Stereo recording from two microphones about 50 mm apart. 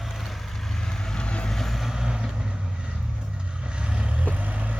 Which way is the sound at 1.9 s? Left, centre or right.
Centre.